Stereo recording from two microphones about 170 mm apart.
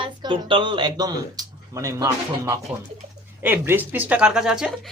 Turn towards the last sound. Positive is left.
turn(degrees=-5)  # may be behind; listen again after turning